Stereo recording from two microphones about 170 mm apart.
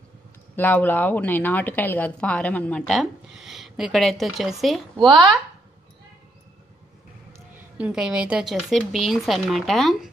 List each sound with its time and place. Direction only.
0.6 s speech: 10° left (ahead or behind)
4.9 s speech: 25° right (ahead or behind)
7.3 s speech: 10° right (ahead or behind)